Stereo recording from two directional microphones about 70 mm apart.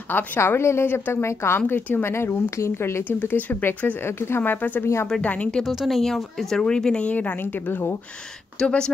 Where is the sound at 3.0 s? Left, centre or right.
Left.